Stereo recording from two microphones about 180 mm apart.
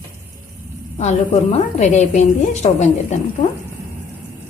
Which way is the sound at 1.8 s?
40° left (ahead or behind).